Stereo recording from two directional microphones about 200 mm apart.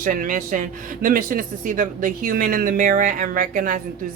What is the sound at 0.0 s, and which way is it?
Speech, 45° right (ahead or behind).